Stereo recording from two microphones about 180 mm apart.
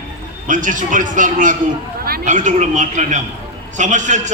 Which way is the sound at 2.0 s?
55° right (ahead or behind).